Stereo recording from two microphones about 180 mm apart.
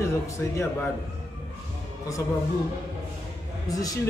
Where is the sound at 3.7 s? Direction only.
20° left (ahead or behind).